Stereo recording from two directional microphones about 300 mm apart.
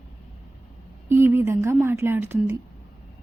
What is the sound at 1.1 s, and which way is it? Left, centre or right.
A woman's voice, centre.